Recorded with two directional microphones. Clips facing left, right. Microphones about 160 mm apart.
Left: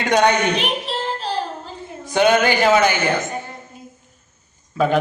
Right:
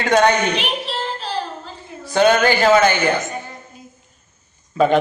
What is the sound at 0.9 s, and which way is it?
Child singing, 45° left (ahead or behind).